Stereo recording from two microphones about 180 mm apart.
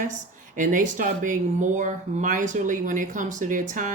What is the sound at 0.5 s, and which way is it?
Speech, 45° right (ahead or behind).